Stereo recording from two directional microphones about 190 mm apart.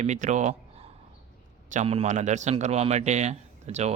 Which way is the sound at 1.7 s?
35° right (ahead or behind).